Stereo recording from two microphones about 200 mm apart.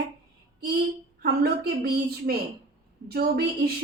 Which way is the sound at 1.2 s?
50° right (ahead or behind).